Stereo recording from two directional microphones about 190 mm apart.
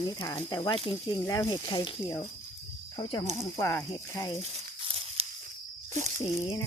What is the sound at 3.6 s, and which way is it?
Speech, 15° left (ahead or behind).